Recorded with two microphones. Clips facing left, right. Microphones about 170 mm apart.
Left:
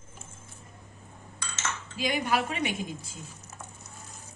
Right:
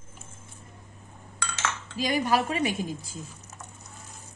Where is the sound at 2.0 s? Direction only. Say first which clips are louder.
Right 3 dB; 40° right (ahead or behind).